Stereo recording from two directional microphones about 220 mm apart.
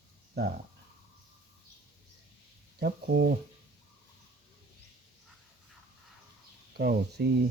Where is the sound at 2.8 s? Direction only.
50° right (ahead or behind).